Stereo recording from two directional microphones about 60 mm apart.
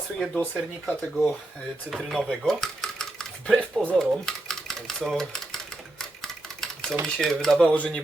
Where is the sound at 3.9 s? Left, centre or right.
Centre.